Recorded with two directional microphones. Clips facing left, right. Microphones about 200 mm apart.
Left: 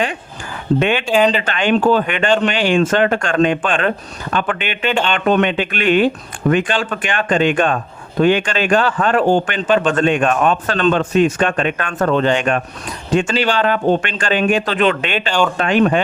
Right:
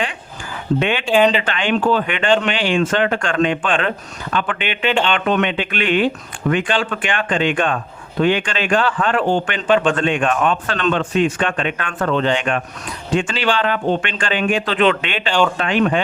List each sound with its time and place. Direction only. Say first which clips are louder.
0.8 s speech: left 3 dB; 45° left (ahead or behind)
1.1 s speech: right 1 dB; 5° right (ahead or behind)
1.4 s speech: left 3 dB; 45° left (ahead or behind)
15.3 s speech: right 1 dB; 5° left (ahead or behind)
15.5 s speech: left 3 dB; 45° left (ahead or behind)